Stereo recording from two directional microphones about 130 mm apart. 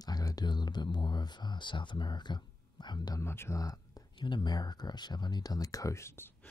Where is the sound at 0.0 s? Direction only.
30° left (ahead or behind).